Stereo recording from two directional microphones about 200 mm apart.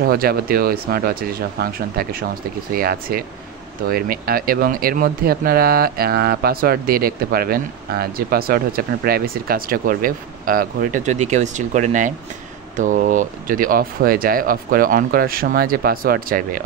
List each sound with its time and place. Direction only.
0.0 s speech: 50° right (ahead or behind)